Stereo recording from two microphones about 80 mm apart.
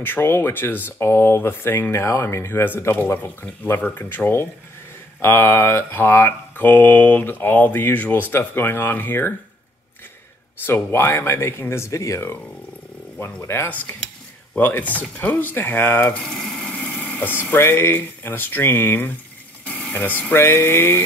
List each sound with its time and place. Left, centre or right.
0.0 s speech: left
10.6 s speech: left
16.3 s speech: centre; by 21.0 s left